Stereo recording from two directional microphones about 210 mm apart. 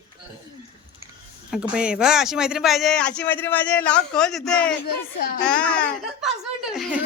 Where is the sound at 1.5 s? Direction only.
5° right (ahead or behind).